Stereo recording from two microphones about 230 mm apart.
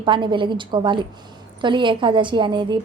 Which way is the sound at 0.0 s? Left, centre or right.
Right.